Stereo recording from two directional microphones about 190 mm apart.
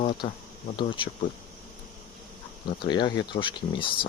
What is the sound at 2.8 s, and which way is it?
Speech, 25° left (ahead or behind).